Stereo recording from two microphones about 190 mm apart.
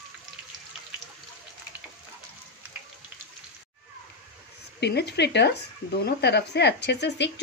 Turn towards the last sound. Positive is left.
turn(degrees=65)  # may be behind; listen again after turning